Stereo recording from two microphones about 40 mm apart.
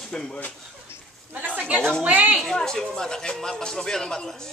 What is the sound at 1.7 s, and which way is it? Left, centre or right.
Speech, centre.